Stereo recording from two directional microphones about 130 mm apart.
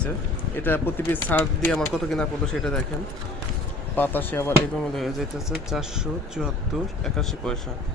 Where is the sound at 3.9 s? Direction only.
15° left (ahead or behind).